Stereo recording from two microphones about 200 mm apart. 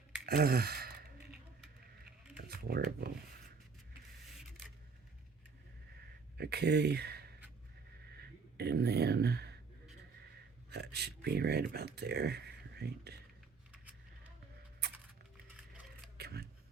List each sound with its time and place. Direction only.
0.3 s gasp: 50° right (ahead or behind)
2.5 s speech: 50° right (ahead or behind)
6.3 s speech: 55° right (ahead or behind)
8.1 s a sound: 55° right (ahead or behind)
10.7 s speech: 55° right (ahead or behind)
16.1 s a sound: 55° right (ahead or behind)